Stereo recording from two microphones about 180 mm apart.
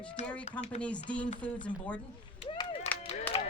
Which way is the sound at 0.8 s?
5° left (ahead or behind).